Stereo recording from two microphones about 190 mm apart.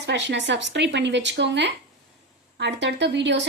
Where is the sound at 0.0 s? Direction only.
65° right (ahead or behind).